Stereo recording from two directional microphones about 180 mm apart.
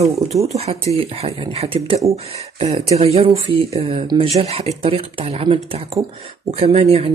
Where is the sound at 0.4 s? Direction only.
35° right (ahead or behind).